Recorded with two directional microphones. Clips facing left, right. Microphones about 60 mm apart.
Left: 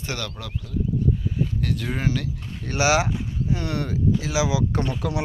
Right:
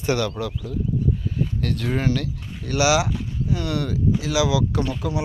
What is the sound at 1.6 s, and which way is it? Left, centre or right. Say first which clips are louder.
Speech: right 6 dB; centre.